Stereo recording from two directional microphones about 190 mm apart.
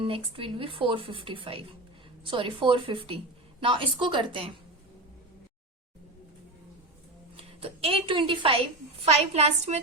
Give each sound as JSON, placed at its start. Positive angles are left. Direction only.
{"t": 0.0, "sound": "speech", "side_deg": -30}
{"t": 7.3, "sound": "a woman's voice", "side_deg": -30}